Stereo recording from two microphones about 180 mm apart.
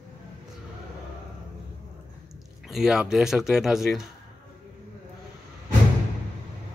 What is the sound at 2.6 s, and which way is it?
A man's voice, centre (ahead or behind).